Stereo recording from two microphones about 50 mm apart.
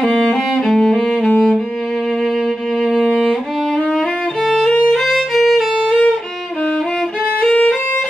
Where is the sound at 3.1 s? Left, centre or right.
Centre.